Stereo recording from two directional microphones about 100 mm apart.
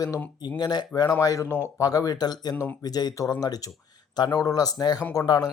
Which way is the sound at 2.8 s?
40° left (ahead or behind).